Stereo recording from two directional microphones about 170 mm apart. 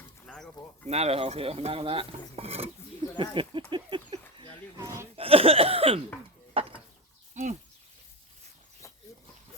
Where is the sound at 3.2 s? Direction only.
30° right (ahead or behind).